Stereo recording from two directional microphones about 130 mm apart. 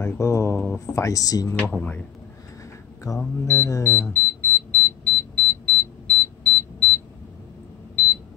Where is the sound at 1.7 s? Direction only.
10° left (ahead or behind).